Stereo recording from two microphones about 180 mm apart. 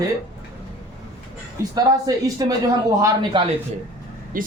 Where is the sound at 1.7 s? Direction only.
20° right (ahead or behind).